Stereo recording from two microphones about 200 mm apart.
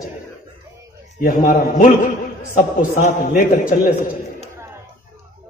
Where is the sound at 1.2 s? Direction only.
45° left (ahead or behind).